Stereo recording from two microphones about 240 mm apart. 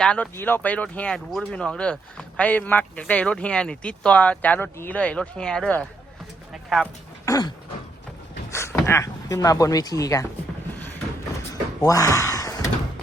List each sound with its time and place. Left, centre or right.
0.0 s speech: centre
7.3 s a sound: centre
8.4 s speech: centre
11.8 s door: centre